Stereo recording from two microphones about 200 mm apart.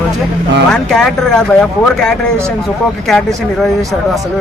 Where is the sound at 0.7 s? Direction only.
Centre (ahead or behind).